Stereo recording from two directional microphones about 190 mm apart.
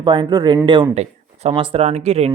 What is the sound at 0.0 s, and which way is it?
Speech, 25° right (ahead or behind).